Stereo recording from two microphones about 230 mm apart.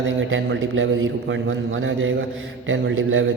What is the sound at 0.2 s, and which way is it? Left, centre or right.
A man's voice, right.